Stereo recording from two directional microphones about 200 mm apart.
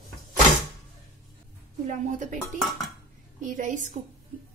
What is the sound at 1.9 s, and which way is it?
Speech, 40° right (ahead or behind).